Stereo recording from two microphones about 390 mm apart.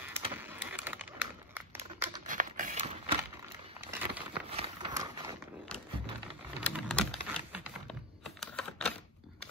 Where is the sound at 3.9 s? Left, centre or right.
Centre.